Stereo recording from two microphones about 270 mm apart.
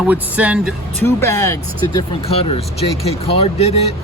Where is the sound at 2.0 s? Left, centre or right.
Left.